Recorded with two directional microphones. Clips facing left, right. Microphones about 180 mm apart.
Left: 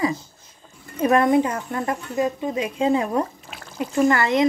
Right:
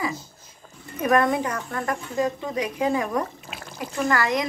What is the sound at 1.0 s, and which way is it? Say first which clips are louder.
Speech: left 4 dB; 25° left (ahead or behind).